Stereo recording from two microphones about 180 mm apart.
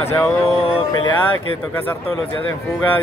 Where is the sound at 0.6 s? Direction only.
25° left (ahead or behind).